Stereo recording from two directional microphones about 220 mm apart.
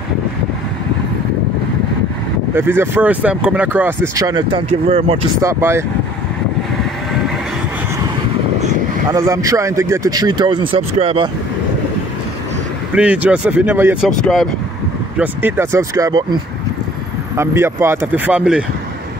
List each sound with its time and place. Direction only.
2.5 s speech: 10° right (ahead or behind); by 5.2 s 25° right (ahead or behind)
5.4 s speech: 10° right (ahead or behind)
9.1 s speech: 15° right (ahead or behind)
12.9 s speech: 5° right (ahead or behind)
14.2 s speech: centre (ahead or behind); by 16.3 s 20° right (ahead or behind)
17.4 s speech: 10° right (ahead or behind)